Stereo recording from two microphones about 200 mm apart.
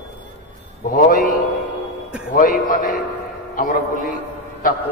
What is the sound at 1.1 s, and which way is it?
Speech, 45° left (ahead or behind).